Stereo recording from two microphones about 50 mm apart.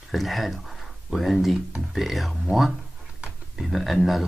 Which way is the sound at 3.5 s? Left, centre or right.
Centre.